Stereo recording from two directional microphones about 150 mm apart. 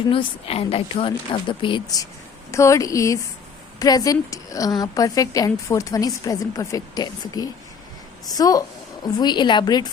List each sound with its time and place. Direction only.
0.1 s a woman's voice: 40° left (ahead or behind)